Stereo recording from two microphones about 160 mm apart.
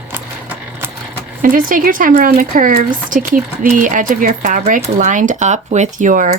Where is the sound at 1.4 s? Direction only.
60° right (ahead or behind).